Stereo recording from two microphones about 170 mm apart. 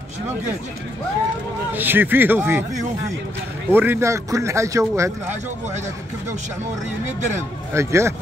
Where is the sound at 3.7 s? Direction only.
15° right (ahead or behind).